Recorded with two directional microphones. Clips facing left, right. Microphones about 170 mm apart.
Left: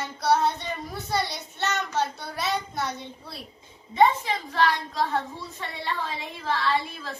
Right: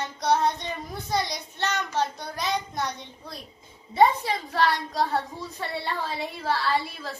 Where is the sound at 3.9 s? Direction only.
40° right (ahead or behind).